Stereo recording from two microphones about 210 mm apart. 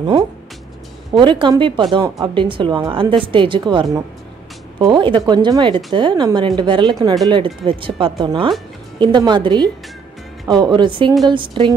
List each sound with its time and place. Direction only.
1.1 s a woman's voice: 20° right (ahead or behind)